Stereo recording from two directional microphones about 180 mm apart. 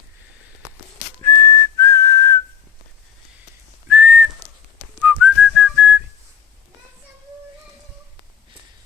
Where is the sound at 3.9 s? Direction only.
10° right (ahead or behind).